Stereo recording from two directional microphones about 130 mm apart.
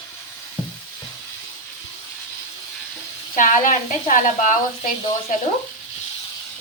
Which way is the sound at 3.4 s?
90° left.